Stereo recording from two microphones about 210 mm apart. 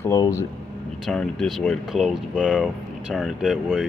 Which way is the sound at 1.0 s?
5° left (ahead or behind).